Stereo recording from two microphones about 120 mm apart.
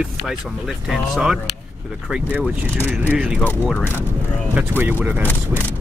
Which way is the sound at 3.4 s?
15° left (ahead or behind).